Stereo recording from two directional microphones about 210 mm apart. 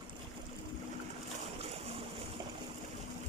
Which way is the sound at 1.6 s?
30° right (ahead or behind).